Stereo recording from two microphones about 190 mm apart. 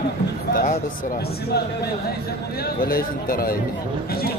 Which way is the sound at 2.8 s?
50° left (ahead or behind).